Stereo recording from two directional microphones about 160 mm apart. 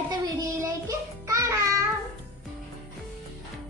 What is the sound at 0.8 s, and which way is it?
Music, 20° right (ahead or behind).